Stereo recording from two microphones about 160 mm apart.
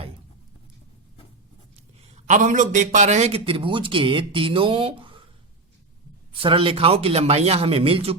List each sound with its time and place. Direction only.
2.1 s a man's voice: 50° right (ahead or behind); by 5.2 s 35° right (ahead or behind)
6.4 s a man's voice: 35° right (ahead or behind)